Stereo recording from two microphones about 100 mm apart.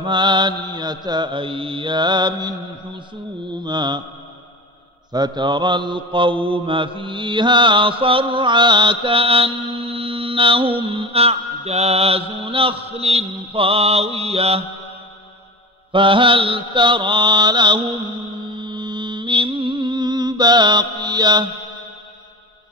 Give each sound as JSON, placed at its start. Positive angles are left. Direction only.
{"t": 0.0, "sound": "mantra", "side_deg": -50}
{"t": 3.6, "sound": "mantra", "side_deg": -45}
{"t": 5.1, "sound": "mantra", "side_deg": -45}
{"t": 15.9, "sound": "mantra", "side_deg": -60}